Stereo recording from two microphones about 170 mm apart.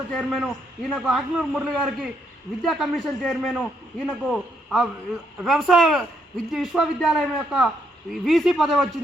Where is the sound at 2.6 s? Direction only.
Centre (ahead or behind).